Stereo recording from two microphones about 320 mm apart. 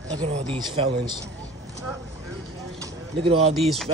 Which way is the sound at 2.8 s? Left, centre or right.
Centre.